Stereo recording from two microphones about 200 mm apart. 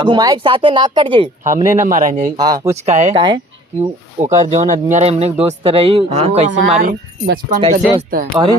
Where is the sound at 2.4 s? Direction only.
20° right (ahead or behind).